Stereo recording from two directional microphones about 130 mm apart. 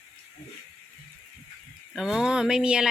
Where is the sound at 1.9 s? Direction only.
Centre (ahead or behind).